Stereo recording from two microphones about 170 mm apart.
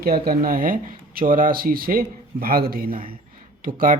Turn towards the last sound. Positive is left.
turn(degrees=-55)  # may be behind; listen again after turning